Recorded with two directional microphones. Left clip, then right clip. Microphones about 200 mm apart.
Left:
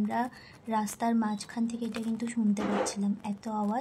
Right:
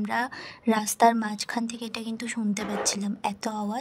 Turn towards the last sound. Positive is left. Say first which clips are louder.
# right 6 dB
turn(degrees=-50)  # may be behind; listen again after turning